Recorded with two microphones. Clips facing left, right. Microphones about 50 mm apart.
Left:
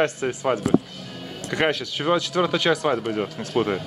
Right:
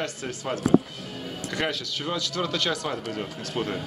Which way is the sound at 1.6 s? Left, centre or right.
Left.